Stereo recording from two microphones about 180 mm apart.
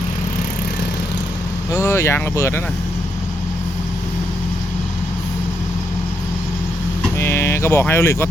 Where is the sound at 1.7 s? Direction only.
15° left (ahead or behind).